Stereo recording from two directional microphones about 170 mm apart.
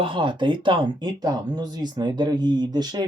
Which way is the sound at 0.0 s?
30° right (ahead or behind).